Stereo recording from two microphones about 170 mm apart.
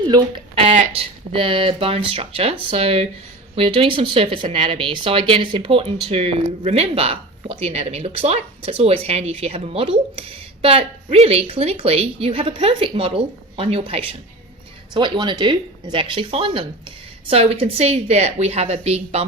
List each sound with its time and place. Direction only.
0.1 s speech: 25° right (ahead or behind)